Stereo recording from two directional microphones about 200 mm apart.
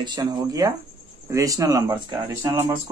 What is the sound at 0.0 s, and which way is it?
Speech, 20° right (ahead or behind).